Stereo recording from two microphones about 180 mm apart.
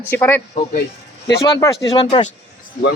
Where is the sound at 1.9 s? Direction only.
30° left (ahead or behind).